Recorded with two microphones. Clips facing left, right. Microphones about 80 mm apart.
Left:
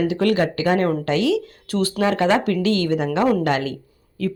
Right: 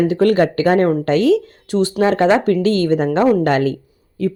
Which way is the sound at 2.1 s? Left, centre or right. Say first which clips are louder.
Right 4 dB; right.